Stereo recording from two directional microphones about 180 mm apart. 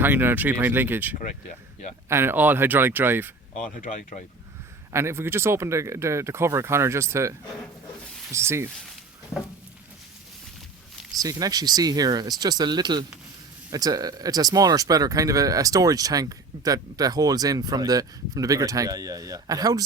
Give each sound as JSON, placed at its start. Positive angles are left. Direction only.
{"t": 0.0, "sound": "speech", "side_deg": -10}
{"t": 1.2, "sound": "speech", "side_deg": 45}
{"t": 2.0, "sound": "speech", "side_deg": -15}
{"t": 3.6, "sound": "speech", "side_deg": 45}
{"t": 4.9, "sound": "speech", "side_deg": -15}
{"t": 11.2, "sound": "speech", "side_deg": -20}